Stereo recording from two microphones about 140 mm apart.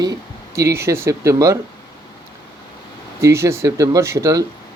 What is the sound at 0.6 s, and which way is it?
Speech, 20° right (ahead or behind).